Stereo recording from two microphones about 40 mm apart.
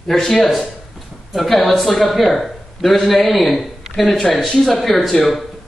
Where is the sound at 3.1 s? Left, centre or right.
Centre.